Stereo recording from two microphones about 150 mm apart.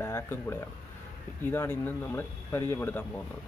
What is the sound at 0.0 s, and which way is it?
A man's voice, 15° left (ahead or behind).